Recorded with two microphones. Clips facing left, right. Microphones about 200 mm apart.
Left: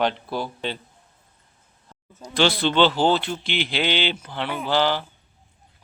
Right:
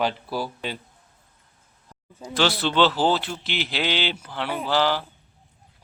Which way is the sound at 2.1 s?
5° right (ahead or behind).